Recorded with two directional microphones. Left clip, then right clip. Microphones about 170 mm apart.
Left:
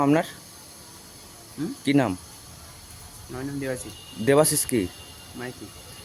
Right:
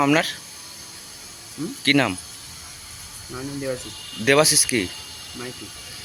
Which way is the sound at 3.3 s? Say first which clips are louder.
Right 2 dB; 15° left (ahead or behind).